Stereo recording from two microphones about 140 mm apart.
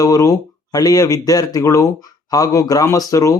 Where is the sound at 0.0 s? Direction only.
25° left (ahead or behind).